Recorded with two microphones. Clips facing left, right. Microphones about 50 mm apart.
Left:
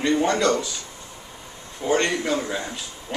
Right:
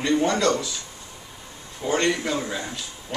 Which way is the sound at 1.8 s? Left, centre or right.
Centre.